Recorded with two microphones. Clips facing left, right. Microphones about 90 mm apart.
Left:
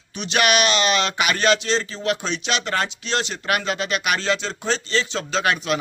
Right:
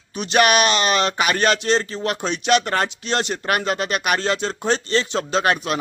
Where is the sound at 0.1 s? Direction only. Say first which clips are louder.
Right 3 dB; 45° right (ahead or behind).